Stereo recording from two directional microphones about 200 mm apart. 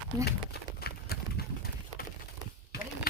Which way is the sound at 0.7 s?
50° left (ahead or behind).